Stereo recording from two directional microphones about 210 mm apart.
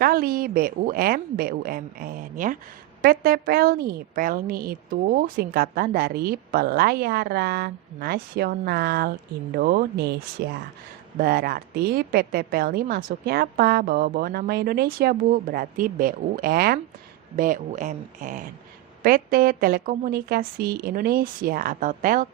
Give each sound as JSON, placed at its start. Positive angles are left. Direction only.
{"t": 0.0, "sound": "a woman's voice", "side_deg": -45}